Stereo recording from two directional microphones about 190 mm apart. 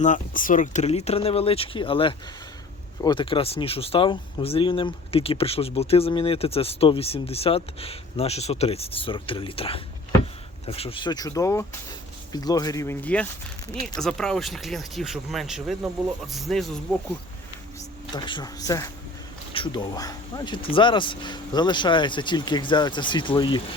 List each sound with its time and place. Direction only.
0.0 s speech: 45° left (ahead or behind); by 16.6 s centre (ahead or behind)
18.1 s speech: 25° left (ahead or behind)